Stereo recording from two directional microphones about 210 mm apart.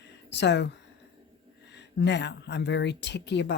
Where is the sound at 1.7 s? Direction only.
55° left (ahead or behind).